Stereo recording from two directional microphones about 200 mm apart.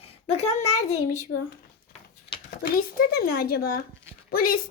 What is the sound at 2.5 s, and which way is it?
Speech, 50° left (ahead or behind).